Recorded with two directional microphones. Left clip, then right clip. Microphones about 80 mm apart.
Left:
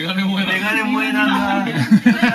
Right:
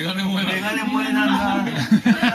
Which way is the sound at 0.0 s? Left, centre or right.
Centre.